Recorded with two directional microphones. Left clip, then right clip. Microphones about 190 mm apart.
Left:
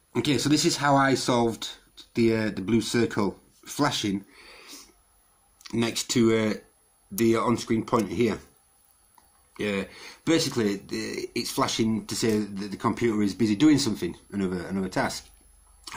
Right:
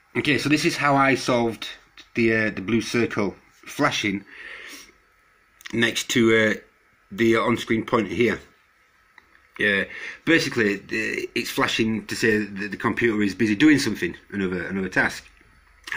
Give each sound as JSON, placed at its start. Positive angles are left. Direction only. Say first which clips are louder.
{"t": 0.1, "sound": "speech", "louder": "right 3 dB", "side_deg": 10}
{"t": 5.7, "sound": "speech", "louder": "right 6 dB", "side_deg": 5}
{"t": 9.6, "sound": "speech", "louder": "right 8 dB", "side_deg": 5}